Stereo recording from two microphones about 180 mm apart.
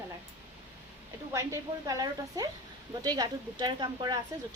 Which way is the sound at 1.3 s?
20° right (ahead or behind).